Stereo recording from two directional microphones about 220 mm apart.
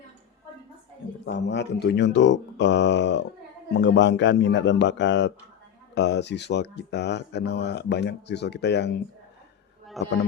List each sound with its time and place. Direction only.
1.2 s speech: 55° left (ahead or behind)
10.0 s speech: centre (ahead or behind)